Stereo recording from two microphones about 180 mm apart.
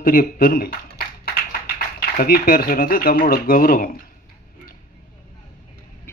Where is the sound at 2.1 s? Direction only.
55° left (ahead or behind).